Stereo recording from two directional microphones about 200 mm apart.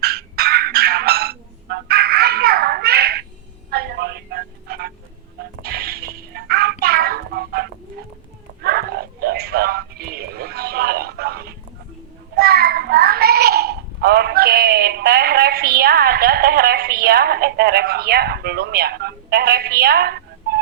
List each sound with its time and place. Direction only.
0.0 s fowl: 50° right (ahead or behind)
3.7 s music: 50° right (ahead or behind)
8.6 s a sound: 50° right (ahead or behind)
12.4 s child singing: 50° right (ahead or behind)